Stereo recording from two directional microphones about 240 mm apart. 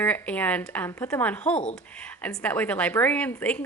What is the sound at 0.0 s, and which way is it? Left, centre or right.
A woman's voice, centre.